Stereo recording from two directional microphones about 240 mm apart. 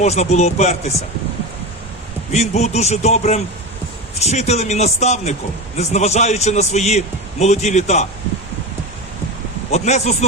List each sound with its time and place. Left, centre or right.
0.0 s a man's voice: left
2.3 s a man's voice: left
9.7 s a man's voice: left